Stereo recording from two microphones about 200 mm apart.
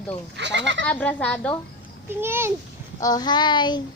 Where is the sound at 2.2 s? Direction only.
10° right (ahead or behind).